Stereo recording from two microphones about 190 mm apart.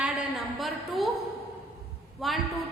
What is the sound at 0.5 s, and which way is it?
Speech, centre (ahead or behind).